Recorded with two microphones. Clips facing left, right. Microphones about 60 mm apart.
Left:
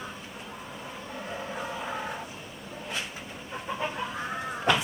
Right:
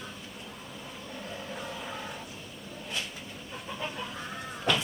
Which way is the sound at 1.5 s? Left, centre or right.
Left.